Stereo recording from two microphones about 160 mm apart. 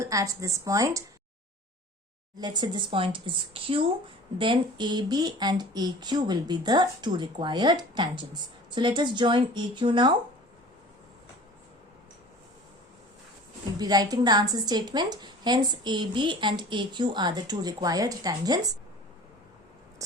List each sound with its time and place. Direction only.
0.0 s a woman's voice: 20° right (ahead or behind)
2.4 s a woman's voice: 25° right (ahead or behind)
13.7 s a woman's voice: 25° right (ahead or behind)